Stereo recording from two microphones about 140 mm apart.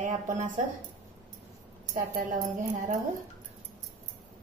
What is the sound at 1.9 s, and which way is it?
Speech, 85° right.